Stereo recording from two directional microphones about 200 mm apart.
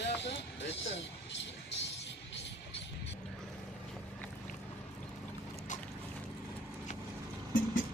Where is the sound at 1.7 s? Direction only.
60° left (ahead or behind).